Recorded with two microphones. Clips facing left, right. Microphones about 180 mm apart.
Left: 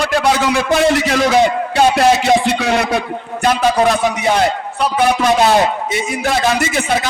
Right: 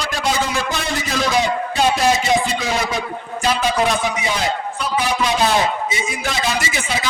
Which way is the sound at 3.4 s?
50° left (ahead or behind).